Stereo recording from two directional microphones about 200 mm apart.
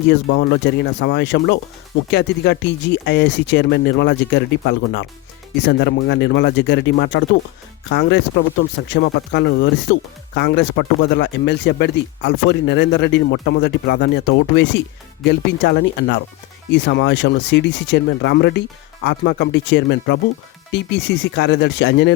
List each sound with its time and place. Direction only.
0.1 s speech: 60° left (ahead or behind)